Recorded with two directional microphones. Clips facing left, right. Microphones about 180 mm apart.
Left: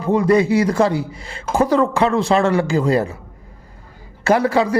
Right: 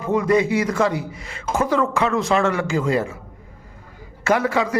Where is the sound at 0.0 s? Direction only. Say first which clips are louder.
Left 3 dB; 35° left (ahead or behind).